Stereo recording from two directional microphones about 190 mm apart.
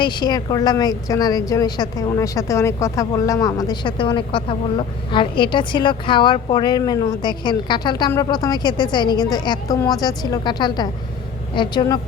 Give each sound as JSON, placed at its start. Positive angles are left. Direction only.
{"t": 0.0, "sound": "a woman's voice", "side_deg": 20}